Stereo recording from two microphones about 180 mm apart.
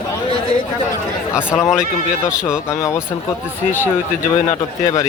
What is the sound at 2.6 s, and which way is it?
Speech, 15° left (ahead or behind).